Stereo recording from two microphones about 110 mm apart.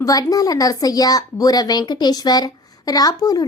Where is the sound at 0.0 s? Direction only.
35° left (ahead or behind).